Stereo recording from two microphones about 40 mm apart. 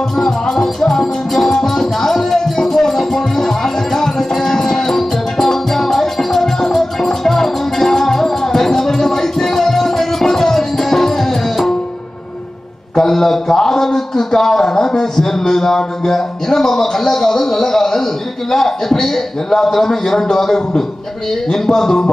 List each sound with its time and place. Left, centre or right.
0.2 s music: centre
12.9 s a man's voice: centre